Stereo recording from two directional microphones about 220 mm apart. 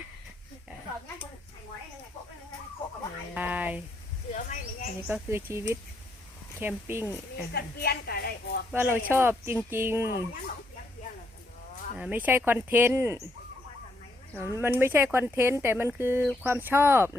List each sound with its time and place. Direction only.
3.3 s speech: 5° right (ahead or behind)
4.4 s speech: 35° left (ahead or behind)
5.0 s speech: 5° right (ahead or behind)
7.5 s a woman's voice: 45° left (ahead or behind)
8.7 s speech: 10° right (ahead or behind)
11.9 s speech: 5° right (ahead or behind)
14.3 s speech: 10° right (ahead or behind)